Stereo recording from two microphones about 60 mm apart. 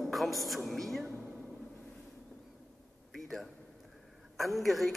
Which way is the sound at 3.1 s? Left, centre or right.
Centre.